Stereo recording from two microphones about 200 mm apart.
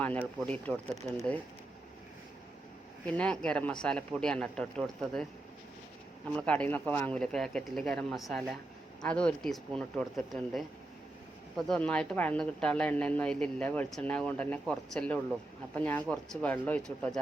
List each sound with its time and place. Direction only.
0.0 s a woman's voice: 10° left (ahead or behind)
3.1 s speech: 5° left (ahead or behind)
6.3 s speech: 5° left (ahead or behind)
11.5 s a woman's voice: 5° left (ahead or behind)